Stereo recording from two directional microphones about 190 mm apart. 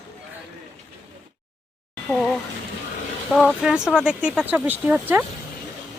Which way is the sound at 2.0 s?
Centre (ahead or behind).